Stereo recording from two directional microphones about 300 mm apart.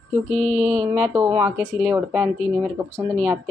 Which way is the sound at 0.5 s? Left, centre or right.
Right.